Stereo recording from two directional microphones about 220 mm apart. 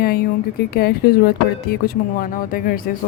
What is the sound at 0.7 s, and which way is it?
A woman's voice, 45° left (ahead or behind).